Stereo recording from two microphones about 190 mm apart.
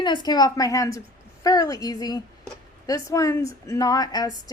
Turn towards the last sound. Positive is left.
turn(degrees=20)  # may be behind; listen again after turning